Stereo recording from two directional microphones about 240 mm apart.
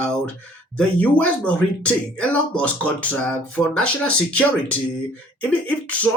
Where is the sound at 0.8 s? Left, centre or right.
Centre.